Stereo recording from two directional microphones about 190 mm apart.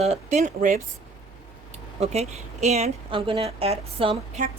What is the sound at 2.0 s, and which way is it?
A woman's voice, 35° right (ahead or behind).